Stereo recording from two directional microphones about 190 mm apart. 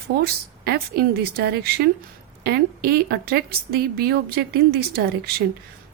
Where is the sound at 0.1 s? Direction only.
60° right (ahead or behind).